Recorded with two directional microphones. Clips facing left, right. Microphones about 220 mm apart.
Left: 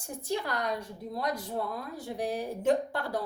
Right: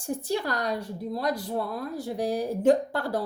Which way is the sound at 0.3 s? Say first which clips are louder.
Right 2 dB; 35° right (ahead or behind).